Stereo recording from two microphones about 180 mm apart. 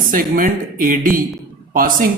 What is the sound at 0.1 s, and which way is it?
Speech, 50° right (ahead or behind).